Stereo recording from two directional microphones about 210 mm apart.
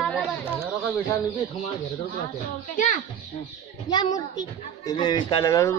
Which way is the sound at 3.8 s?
20° left (ahead or behind).